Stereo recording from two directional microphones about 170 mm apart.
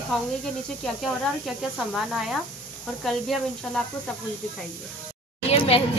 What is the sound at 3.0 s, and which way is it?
Speech, centre (ahead or behind).